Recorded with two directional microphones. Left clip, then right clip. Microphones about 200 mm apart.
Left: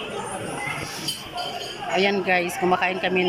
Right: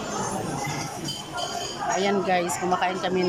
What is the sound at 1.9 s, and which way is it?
Speech, 5° right (ahead or behind).